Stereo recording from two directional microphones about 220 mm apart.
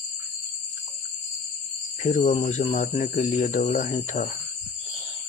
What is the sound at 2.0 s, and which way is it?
Speech, 35° left (ahead or behind).